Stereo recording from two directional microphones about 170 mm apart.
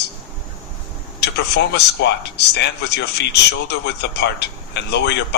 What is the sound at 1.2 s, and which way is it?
A man's voice, 80° left.